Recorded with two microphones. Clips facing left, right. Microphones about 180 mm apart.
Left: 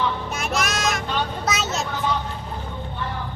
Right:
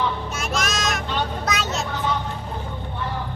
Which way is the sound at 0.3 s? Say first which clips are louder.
Left 1 dB; 10° left (ahead or behind).